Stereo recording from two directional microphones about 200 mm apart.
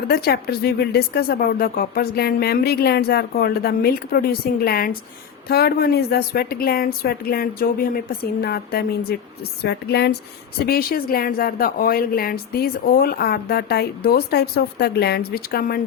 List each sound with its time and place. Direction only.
0.1 s a woman's voice: 50° left (ahead or behind)